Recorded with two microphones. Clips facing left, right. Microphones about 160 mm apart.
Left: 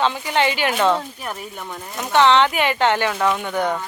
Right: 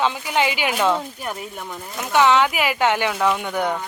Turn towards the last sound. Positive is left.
turn(degrees=-10)  # may be behind; listen again after turning